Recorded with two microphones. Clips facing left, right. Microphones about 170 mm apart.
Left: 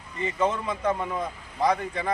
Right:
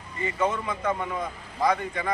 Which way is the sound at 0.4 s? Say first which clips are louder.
Left 1 dB; 30° left (ahead or behind).